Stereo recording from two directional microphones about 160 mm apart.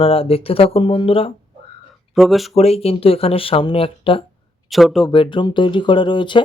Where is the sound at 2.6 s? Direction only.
40° left (ahead or behind).